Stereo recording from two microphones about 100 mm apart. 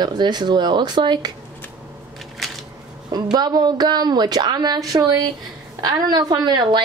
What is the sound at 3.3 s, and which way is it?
Speech, 45° right (ahead or behind).